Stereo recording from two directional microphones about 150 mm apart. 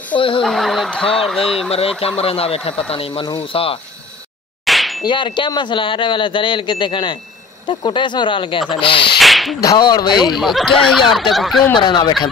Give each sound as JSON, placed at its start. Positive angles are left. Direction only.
{"t": 0.1, "sound": "a woman's voice", "side_deg": 35}
{"t": 0.4, "sound": "speech", "side_deg": 0}
{"t": 2.0, "sound": "speech", "side_deg": 40}
{"t": 4.6, "sound": "clang", "side_deg": 0}
{"t": 5.0, "sound": "speech", "side_deg": 30}
{"t": 9.2, "sound": "whip", "side_deg": 0}
{"t": 9.6, "sound": "speech", "side_deg": 25}
{"t": 10.4, "sound": "speech", "side_deg": 0}
{"t": 11.7, "sound": "speech", "side_deg": 30}